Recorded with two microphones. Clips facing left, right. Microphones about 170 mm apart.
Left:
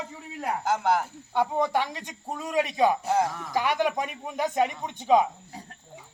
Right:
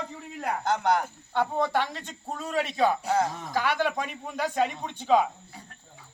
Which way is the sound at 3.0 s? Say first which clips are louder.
Left 1 dB; 5° left (ahead or behind).